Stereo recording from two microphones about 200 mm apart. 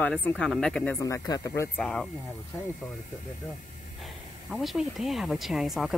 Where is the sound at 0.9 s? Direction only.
15° left (ahead or behind).